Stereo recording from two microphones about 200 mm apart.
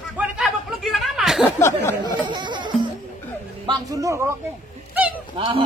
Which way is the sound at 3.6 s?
20° right (ahead or behind).